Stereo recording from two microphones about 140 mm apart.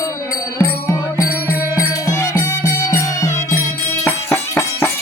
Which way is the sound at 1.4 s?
10° right (ahead or behind).